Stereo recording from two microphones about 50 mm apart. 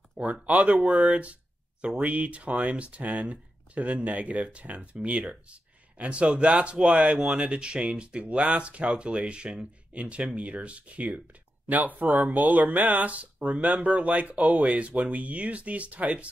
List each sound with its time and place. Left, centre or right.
0.2 s speech: right
11.7 s speech: right